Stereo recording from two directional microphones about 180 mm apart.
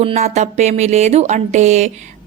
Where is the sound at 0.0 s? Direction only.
40° right (ahead or behind).